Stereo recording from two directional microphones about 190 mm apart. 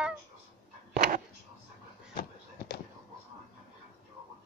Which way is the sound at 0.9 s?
55° right (ahead or behind).